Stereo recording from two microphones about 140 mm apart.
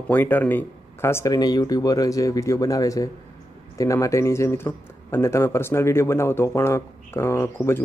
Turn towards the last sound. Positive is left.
turn(degrees=20)  # may be behind; listen again after turning